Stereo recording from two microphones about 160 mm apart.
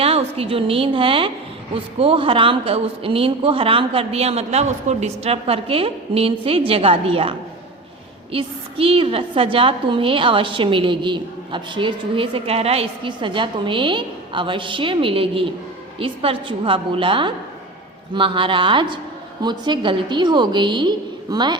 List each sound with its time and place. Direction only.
0.0 s a woman's voice: 40° right (ahead or behind)